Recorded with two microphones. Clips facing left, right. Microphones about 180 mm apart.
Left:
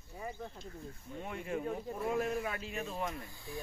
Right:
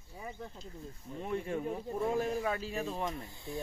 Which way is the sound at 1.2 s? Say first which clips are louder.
Right 3 dB; 35° right (ahead or behind).